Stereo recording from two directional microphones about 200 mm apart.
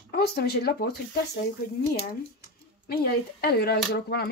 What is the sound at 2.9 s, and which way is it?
Speech, 50° left (ahead or behind).